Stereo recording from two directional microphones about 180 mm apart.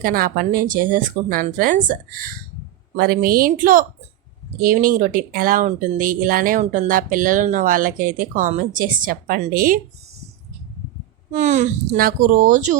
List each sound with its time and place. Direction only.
0.0 s speech: 50° right (ahead or behind)
11.3 s speech: 40° right (ahead or behind)